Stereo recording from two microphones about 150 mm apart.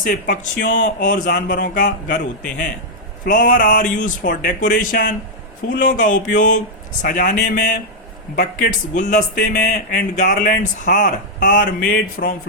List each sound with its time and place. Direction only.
0.0 s speech: 65° left (ahead or behind)
3.2 s speech: 60° left (ahead or behind)
4.0 s a man's voice: 75° left (ahead or behind)